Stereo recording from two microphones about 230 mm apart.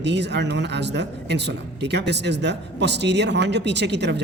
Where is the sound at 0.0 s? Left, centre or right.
Right.